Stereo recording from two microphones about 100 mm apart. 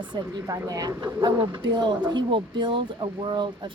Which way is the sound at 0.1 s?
40° right (ahead or behind).